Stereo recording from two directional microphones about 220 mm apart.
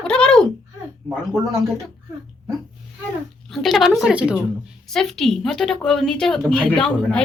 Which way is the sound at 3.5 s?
Centre (ahead or behind).